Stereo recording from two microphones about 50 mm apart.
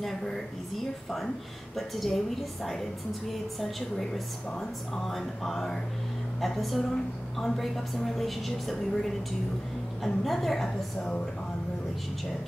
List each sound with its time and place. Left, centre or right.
1.8 s a woman's voice: centre
11.0 s speech: left